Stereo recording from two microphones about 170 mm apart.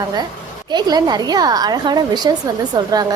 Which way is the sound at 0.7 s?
25° right (ahead or behind).